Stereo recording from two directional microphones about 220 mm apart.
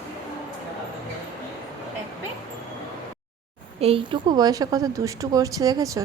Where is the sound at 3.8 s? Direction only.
25° right (ahead or behind).